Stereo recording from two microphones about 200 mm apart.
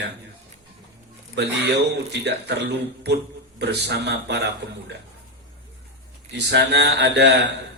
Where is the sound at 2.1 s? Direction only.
60° right (ahead or behind).